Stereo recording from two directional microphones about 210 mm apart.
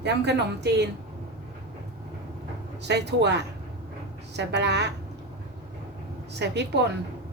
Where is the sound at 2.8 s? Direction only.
55° right (ahead or behind).